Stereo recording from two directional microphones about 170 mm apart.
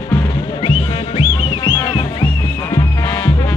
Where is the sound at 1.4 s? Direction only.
25° left (ahead or behind).